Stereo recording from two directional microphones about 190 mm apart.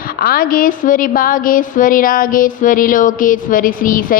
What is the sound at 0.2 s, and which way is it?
A woman's voice, 50° left (ahead or behind).